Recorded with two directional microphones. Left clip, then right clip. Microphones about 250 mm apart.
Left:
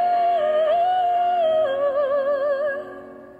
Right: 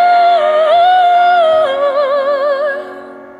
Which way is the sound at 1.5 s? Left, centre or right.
Right.